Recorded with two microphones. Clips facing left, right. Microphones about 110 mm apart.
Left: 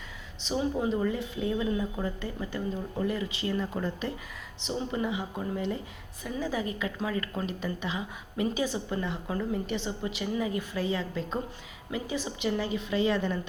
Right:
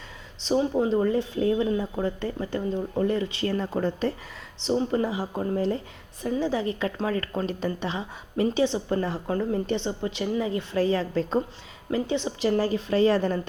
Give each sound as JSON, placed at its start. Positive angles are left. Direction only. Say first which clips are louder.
{"t": 0.3, "sound": "a woman's voice", "louder": "right 6 dB", "side_deg": -35}